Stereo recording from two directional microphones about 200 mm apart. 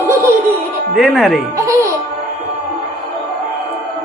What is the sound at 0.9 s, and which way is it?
Speech, centre (ahead or behind).